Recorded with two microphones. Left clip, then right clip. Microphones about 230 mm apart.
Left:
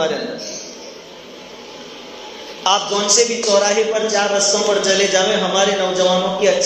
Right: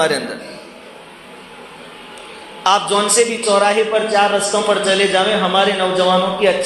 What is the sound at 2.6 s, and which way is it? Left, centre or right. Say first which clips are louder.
A man's voice: right 2 dB; right.